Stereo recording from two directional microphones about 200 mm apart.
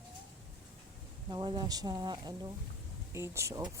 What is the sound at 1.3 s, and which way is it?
A woman's voice, 25° right (ahead or behind).